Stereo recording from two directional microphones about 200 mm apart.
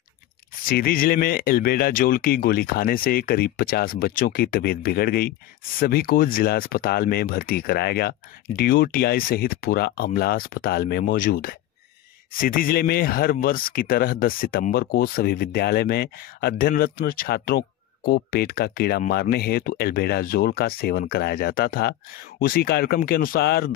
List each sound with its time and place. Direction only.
0.7 s speech: 45° left (ahead or behind)